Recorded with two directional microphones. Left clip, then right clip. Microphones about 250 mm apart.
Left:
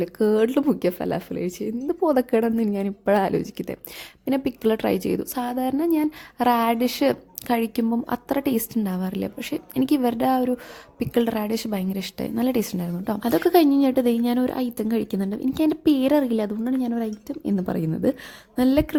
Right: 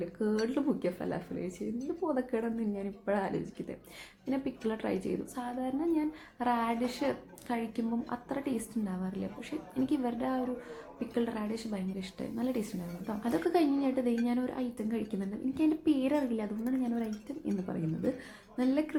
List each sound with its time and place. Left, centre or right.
0.0 s a woman's voice: left